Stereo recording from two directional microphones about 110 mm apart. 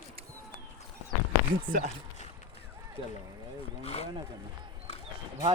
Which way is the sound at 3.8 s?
65° left (ahead or behind).